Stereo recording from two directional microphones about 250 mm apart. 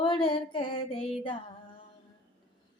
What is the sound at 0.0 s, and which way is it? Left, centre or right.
Female singing, centre.